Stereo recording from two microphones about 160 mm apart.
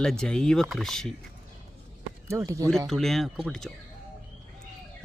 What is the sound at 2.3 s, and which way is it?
Speech, 20° right (ahead or behind).